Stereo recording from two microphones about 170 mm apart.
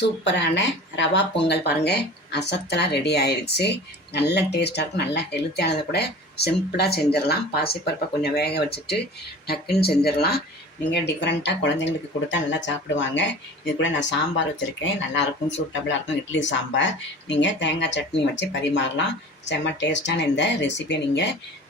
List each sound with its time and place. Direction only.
0.0 s speech: 90° left; by 10.4 s 65° left (ahead or behind)
10.9 s speech: 90° left